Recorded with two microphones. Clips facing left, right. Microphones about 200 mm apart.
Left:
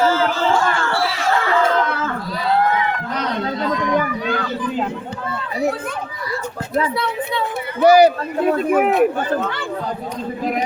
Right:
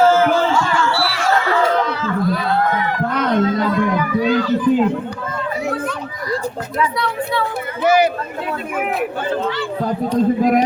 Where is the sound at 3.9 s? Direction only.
50° left (ahead or behind).